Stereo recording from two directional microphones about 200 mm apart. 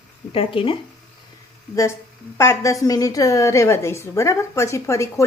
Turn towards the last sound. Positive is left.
turn(degrees=15)  # may be behind; listen again after turning